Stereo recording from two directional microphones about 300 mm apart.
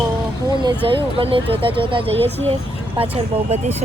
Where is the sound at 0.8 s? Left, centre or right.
Centre.